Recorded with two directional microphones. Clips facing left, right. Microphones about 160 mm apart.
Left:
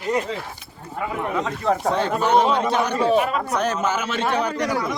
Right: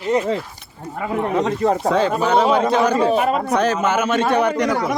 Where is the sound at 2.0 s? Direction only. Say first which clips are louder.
Right 2 dB; 90° right.